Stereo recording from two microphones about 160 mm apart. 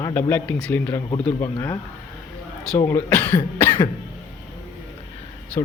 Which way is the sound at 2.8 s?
15° left (ahead or behind).